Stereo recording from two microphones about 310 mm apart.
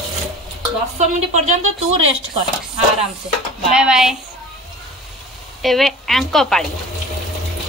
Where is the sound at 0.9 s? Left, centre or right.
Right.